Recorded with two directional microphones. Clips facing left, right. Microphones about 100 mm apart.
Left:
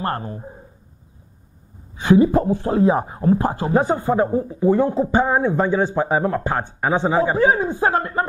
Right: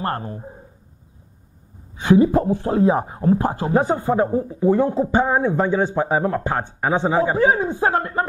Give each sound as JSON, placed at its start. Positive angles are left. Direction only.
{"t": 0.0, "sound": "speech", "side_deg": 25}
{"t": 2.0, "sound": "speech", "side_deg": 25}